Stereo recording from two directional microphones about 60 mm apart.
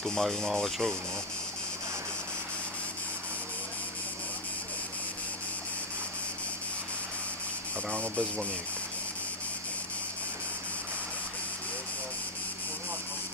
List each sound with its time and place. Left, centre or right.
0.0 s speech: centre
7.9 s speech: centre